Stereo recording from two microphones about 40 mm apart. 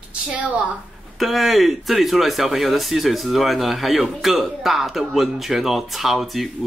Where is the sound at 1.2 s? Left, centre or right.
Centre.